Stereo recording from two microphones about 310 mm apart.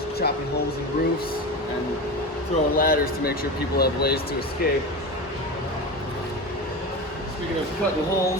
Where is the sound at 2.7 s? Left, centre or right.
Left.